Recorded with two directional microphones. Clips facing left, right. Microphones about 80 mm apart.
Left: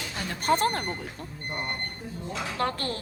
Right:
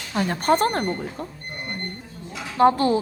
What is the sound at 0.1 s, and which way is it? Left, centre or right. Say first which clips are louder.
Speech: right 6 dB; right.